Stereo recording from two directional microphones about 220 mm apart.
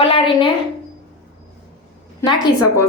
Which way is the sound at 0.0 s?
25° left (ahead or behind).